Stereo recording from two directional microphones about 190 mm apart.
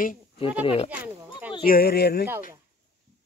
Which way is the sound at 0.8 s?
10° right (ahead or behind).